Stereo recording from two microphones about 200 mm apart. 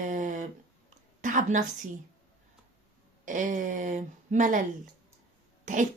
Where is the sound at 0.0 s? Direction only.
40° right (ahead or behind).